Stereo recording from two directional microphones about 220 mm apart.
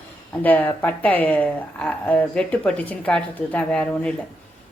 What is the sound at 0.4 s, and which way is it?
A woman's voice, 10° left (ahead or behind).